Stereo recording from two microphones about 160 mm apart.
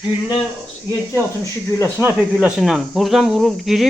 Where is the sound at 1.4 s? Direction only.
20° left (ahead or behind).